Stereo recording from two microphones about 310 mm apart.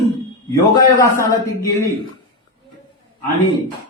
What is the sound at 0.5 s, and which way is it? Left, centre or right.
A man's voice, centre.